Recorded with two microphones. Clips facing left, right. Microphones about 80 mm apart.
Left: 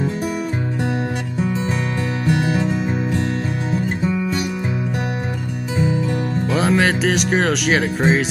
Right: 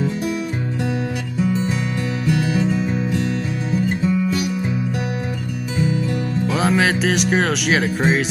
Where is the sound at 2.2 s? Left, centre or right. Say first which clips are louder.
Left 1 dB; left.